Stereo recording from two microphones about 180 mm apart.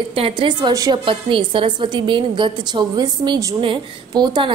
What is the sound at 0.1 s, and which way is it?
A woman's voice, 30° right (ahead or behind).